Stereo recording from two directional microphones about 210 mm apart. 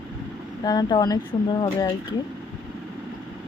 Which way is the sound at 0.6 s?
20° left (ahead or behind).